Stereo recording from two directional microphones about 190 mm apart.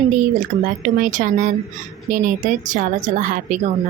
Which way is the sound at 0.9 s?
45° right (ahead or behind).